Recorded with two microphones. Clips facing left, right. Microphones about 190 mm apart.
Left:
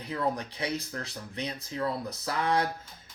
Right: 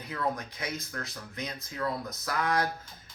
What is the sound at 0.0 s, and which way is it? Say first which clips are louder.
Speech: left 2 dB; 30° left (ahead or behind).